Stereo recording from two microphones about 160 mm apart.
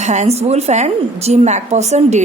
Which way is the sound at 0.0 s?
45° right (ahead or behind).